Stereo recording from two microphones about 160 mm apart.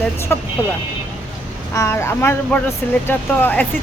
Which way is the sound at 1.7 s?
20° left (ahead or behind).